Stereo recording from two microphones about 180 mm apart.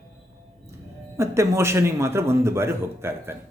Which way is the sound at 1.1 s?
15° right (ahead or behind).